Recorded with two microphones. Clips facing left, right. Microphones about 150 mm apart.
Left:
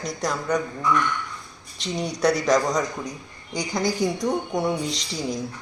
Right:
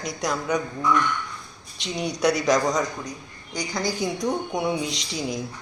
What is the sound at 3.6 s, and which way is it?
Speech, 20° left (ahead or behind).